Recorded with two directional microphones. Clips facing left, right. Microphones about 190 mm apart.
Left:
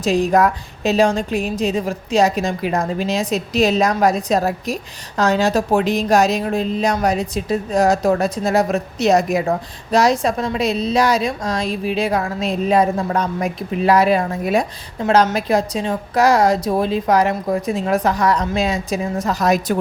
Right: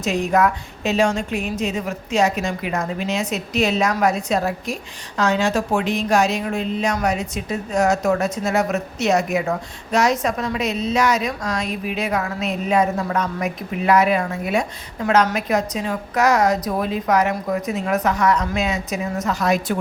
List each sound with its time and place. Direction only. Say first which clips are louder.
0.0 s a woman's voice: left 3 dB; 35° left (ahead or behind)